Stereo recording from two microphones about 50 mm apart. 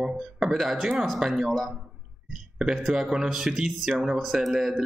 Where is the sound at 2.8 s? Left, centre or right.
Centre.